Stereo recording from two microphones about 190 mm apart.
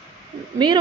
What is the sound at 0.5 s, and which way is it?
Speech, 25° right (ahead or behind).